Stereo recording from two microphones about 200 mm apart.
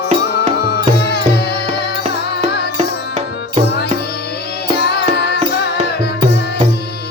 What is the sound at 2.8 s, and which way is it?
Music, 35° right (ahead or behind).